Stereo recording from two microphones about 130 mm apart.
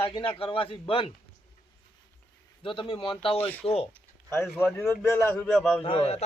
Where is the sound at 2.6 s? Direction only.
40° left (ahead or behind).